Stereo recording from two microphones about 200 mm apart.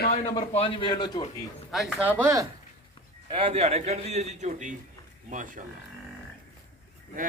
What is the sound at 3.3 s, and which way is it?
A man's voice, 30° right (ahead or behind).